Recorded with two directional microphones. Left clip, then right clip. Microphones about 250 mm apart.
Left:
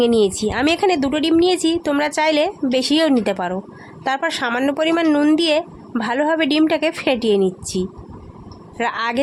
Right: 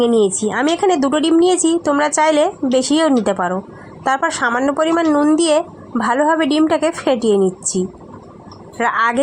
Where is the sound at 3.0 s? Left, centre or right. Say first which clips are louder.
Right 2 dB; centre.